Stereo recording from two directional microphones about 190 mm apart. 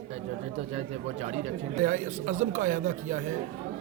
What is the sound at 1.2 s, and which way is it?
A man's voice, 35° right (ahead or behind).